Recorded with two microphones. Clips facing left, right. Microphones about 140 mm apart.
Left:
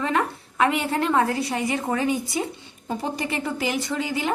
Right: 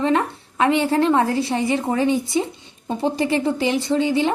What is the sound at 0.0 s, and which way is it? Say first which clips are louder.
A woman's voice: right 4 dB; 30° right (ahead or behind).